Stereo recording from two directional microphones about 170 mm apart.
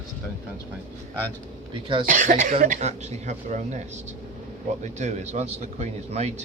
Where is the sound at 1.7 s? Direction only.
30° right (ahead or behind).